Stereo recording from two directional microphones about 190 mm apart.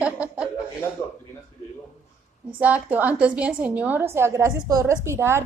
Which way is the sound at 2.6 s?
10° right (ahead or behind).